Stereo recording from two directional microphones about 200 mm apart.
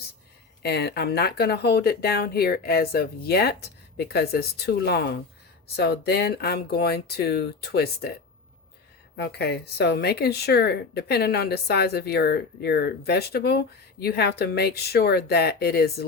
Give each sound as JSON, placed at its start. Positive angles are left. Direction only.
{"t": 0.6, "sound": "speech", "side_deg": 55}
{"t": 9.1, "sound": "speech", "side_deg": 55}